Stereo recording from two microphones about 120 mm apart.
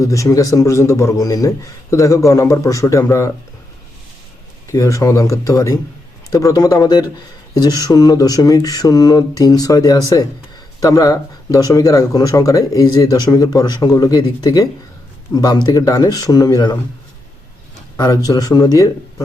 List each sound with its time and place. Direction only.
0.0 s a man's voice: 25° left (ahead or behind)
4.7 s a man's voice: 25° left (ahead or behind)
17.9 s a man's voice: 30° left (ahead or behind)